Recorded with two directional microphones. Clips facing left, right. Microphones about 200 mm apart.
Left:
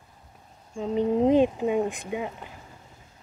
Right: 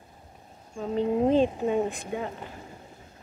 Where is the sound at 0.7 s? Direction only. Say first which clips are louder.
Left 2 dB; 15° left (ahead or behind).